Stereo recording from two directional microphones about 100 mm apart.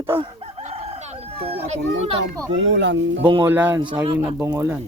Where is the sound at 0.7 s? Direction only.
90° right.